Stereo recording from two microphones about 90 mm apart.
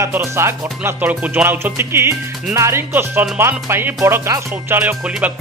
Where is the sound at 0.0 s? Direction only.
30° right (ahead or behind).